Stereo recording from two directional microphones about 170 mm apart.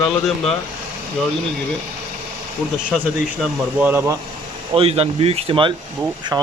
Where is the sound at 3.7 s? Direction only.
10° right (ahead or behind).